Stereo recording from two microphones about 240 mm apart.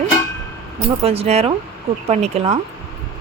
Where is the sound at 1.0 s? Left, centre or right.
Right.